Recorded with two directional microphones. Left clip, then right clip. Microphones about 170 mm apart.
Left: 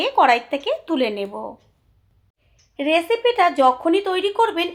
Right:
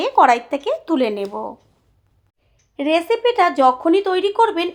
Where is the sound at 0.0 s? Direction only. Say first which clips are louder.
Right 2 dB; 35° right (ahead or behind).